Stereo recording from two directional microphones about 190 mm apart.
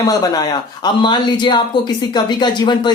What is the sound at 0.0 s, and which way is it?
Speech, 20° left (ahead or behind).